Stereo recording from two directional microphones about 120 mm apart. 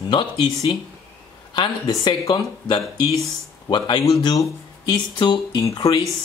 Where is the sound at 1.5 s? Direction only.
40° left (ahead or behind).